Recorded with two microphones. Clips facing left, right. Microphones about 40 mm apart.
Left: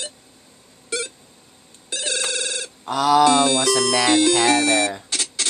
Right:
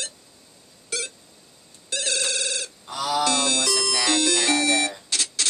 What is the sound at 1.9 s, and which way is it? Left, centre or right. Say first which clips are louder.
Telephone bell ringing: left 1 dB; centre.